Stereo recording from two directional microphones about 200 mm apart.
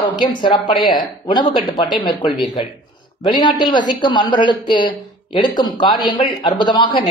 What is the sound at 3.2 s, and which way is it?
Speech, 25° left (ahead or behind).